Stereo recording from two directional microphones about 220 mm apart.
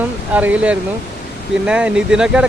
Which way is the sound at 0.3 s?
5° right (ahead or behind).